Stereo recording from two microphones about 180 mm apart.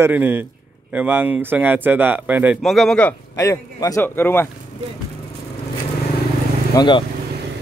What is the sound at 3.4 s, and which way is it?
A man's voice, 15° left (ahead or behind).